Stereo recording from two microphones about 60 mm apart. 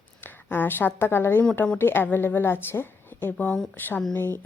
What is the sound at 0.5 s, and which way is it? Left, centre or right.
A woman's voice, left.